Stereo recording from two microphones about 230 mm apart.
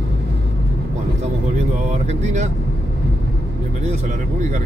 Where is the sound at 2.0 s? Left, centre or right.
Right.